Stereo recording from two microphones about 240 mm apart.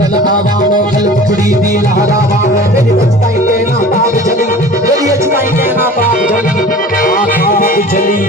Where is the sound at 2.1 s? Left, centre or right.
Left.